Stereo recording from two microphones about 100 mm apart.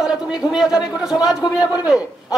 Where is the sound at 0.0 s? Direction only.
5° right (ahead or behind).